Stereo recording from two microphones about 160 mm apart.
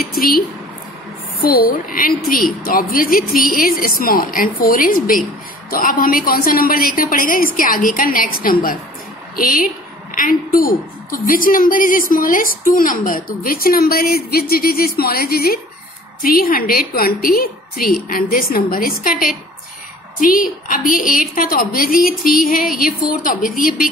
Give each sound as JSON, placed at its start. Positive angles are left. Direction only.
{"t": 1.4, "sound": "a woman's voice", "side_deg": 70}